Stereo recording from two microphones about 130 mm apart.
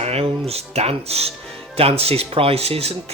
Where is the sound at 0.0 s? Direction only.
50° right (ahead or behind).